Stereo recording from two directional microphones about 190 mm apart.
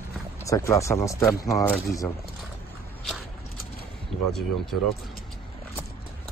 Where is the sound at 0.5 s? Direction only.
15° left (ahead or behind).